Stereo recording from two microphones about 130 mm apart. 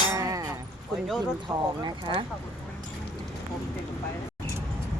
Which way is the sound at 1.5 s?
15° right (ahead or behind).